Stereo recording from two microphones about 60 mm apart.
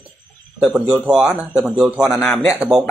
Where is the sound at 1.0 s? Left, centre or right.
Centre.